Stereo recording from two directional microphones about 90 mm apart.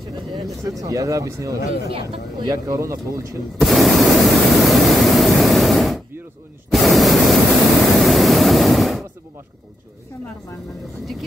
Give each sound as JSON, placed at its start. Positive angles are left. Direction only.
{"t": 0.7, "sound": "speech", "side_deg": -40}
{"t": 3.5, "sound": "pink noise", "side_deg": 0}